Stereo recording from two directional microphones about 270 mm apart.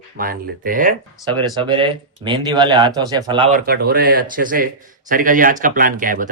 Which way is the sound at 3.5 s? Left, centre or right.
Right.